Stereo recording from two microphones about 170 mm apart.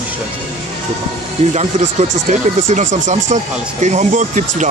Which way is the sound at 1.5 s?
40° right (ahead or behind).